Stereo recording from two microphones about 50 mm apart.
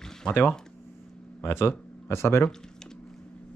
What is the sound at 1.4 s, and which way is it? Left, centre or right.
Speech, left.